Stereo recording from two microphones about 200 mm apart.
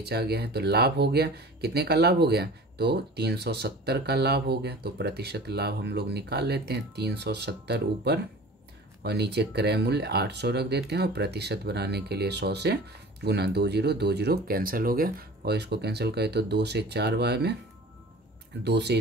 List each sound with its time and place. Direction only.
0.0 s speech: 55° right (ahead or behind)
18.6 s speech: 55° right (ahead or behind)